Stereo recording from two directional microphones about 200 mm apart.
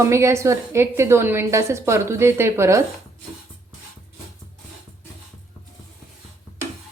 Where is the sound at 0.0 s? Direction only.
15° right (ahead or behind).